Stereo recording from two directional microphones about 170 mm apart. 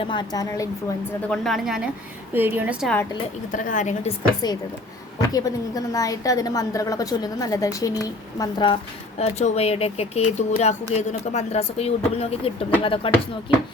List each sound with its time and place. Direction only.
0.0 s a woman's voice: 30° left (ahead or behind)
1.3 s a woman's voice: centre (ahead or behind)
2.8 s a woman's voice: 10° left (ahead or behind)
3.5 s a woman's voice: 50° left (ahead or behind)
4.4 s a woman's voice: 25° left (ahead or behind)